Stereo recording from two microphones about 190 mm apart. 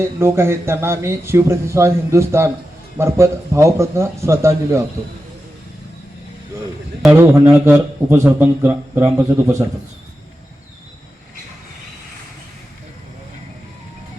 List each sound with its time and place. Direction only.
0.2 s a man's voice: 15° right (ahead or behind)
7.0 s a man's voice: 10° right (ahead or behind)